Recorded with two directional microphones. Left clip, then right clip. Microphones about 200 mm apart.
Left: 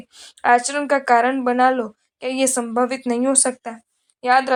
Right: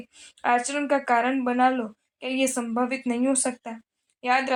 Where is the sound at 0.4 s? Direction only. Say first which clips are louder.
Left 7 dB; 25° left (ahead or behind).